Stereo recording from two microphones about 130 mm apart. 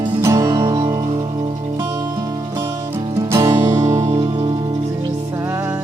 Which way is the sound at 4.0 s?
55° right (ahead or behind).